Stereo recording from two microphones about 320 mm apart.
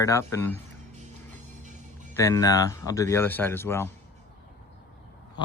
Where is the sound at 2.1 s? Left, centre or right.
Centre.